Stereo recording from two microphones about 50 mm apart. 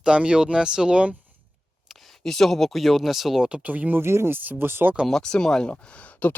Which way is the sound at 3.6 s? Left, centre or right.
Right.